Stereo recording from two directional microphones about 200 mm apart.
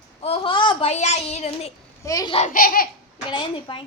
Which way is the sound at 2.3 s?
40° left (ahead or behind).